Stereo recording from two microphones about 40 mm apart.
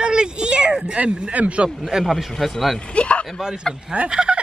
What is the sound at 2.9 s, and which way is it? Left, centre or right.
Speech, left.